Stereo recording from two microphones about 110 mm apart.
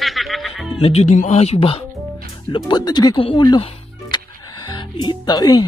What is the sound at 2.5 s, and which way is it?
Speech, 45° left (ahead or behind).